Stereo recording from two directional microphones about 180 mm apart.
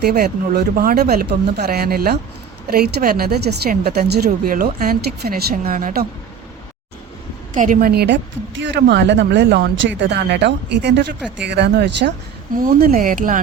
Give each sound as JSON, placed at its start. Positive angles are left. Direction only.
{"t": 0.1, "sound": "a woman's voice", "side_deg": -60}
{"t": 7.5, "sound": "a woman's voice", "side_deg": -45}
{"t": 12.5, "sound": "speech", "side_deg": -50}